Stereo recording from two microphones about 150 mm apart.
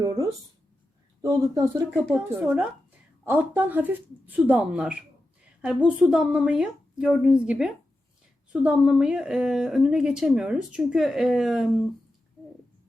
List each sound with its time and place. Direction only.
1.2 s speech: 20° right (ahead or behind); by 11.7 s centre (ahead or behind)